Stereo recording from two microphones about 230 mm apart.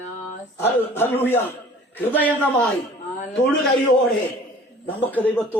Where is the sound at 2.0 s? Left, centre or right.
Centre.